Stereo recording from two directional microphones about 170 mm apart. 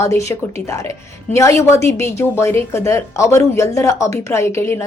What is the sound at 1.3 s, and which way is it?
A woman's voice, 15° left (ahead or behind).